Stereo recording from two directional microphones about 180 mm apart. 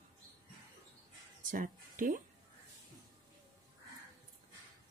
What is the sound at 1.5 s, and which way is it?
Music, 50° right (ahead or behind).